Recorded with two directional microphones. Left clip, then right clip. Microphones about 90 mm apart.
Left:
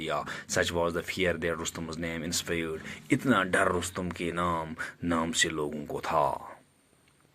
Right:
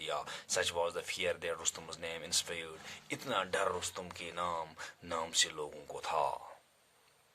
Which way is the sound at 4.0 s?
35° left (ahead or behind).